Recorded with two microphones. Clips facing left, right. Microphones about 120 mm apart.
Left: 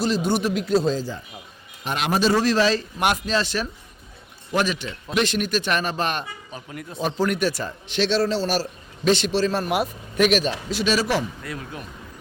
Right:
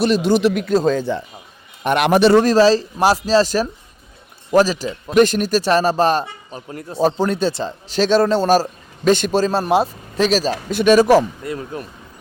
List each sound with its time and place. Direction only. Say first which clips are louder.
0.0 s a man's voice: right 7 dB; 80° right
2.4 s a man's voice: right 7 dB; 40° right (ahead or behind)
7.9 s a man's voice: right 6 dB; 45° right (ahead or behind)
9.5 s a man's voice: right 6 dB; 30° right (ahead or behind)
10.7 s a man's voice: right 12 dB; 50° right (ahead or behind)
11.4 s speech: right 7 dB; 30° right (ahead or behind)